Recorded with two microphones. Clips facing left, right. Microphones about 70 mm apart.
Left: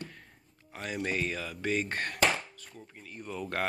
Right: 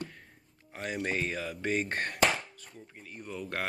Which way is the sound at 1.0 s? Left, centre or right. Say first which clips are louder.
Even; right.